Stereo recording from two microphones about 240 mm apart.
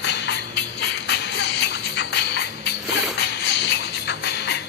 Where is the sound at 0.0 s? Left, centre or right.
Left.